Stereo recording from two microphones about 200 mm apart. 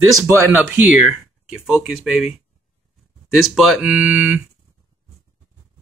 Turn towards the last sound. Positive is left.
turn(degrees=-10)  # may be behind; listen again after turning